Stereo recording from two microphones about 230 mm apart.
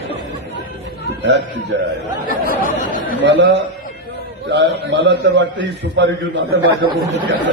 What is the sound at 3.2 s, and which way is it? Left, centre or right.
A man's voice, right.